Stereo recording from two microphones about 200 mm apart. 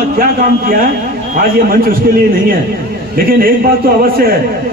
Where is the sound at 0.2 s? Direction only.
45° right (ahead or behind).